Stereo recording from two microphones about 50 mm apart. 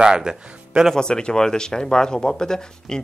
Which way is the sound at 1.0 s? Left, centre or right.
Centre.